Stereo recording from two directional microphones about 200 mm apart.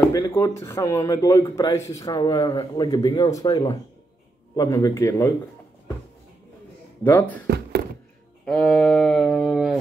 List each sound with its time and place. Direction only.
0.1 s speech: 15° left (ahead or behind)
7.0 s speech: 10° left (ahead or behind)
7.4 s a sound: 55° right (ahead or behind)
8.5 s mantra: 5° left (ahead or behind)